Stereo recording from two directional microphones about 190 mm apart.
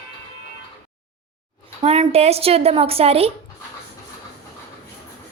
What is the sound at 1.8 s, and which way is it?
Speech, 30° right (ahead or behind).